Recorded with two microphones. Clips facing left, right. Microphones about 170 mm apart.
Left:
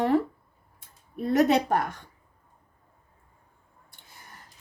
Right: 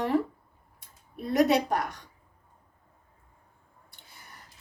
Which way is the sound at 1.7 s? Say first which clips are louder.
Left 3 dB; 50° left (ahead or behind).